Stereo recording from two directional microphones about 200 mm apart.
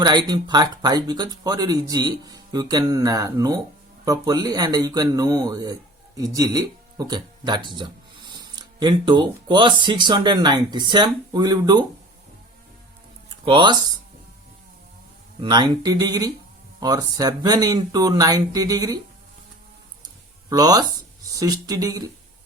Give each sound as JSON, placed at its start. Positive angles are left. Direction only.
{"t": 0.0, "sound": "speech", "side_deg": -20}
{"t": 13.4, "sound": "speech", "side_deg": -25}
{"t": 15.4, "sound": "speech", "side_deg": -20}
{"t": 20.5, "sound": "speech", "side_deg": -20}